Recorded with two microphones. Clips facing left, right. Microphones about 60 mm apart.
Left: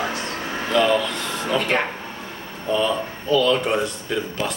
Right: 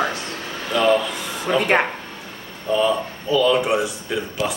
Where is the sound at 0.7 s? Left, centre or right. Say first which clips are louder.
Right 1 dB; centre.